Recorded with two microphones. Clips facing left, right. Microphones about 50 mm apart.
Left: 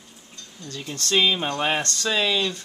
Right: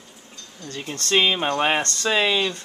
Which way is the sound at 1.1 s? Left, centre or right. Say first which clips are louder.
Right 2 dB; right.